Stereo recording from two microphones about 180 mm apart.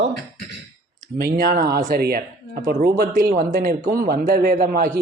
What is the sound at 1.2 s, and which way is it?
Speech, 50° right (ahead or behind).